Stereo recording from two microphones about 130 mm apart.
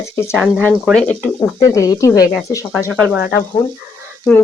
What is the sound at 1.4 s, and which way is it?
Speech, 25° left (ahead or behind).